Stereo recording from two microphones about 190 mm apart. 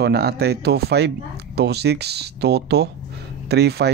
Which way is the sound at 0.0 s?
60° right (ahead or behind).